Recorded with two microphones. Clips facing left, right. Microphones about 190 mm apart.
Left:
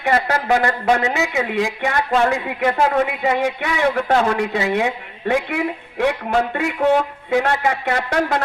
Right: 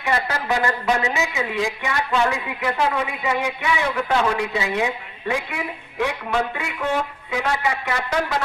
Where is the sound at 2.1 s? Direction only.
50° left (ahead or behind).